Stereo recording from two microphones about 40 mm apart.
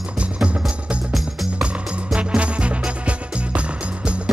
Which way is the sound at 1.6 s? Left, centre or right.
Right.